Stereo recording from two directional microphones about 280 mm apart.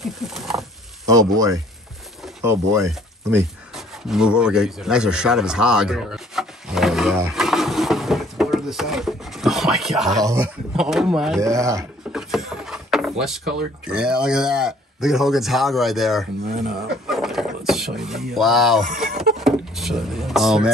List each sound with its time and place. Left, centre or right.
0.0 s wild animals: centre
1.0 s speech: centre
10.2 s a sound: centre
13.2 s speech: centre
16.5 s speech: right
17.1 s a sound: centre